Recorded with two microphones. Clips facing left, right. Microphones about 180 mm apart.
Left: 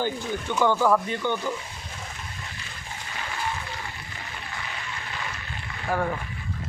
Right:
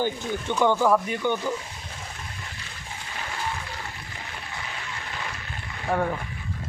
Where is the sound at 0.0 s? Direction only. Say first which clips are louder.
Right 1 dB; 15° right (ahead or behind).